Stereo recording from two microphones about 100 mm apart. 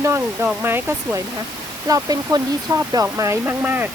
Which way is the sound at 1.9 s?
40° right (ahead or behind).